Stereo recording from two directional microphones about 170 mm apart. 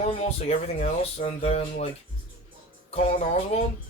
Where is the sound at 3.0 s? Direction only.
40° left (ahead or behind).